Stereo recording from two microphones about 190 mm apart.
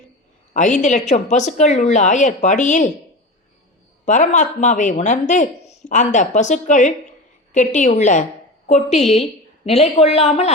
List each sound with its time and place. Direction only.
0.5 s speech: 40° left (ahead or behind)
4.0 s a woman's voice: 40° left (ahead or behind)